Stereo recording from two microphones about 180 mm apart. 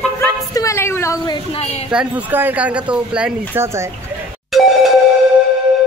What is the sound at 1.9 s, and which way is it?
Speech, 5° right (ahead or behind).